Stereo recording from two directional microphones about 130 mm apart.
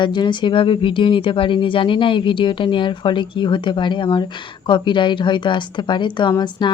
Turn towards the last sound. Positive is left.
turn(degrees=35)  # may be behind; listen again after turning